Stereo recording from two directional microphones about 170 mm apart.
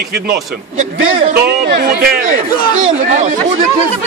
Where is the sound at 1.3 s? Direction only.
65° right (ahead or behind).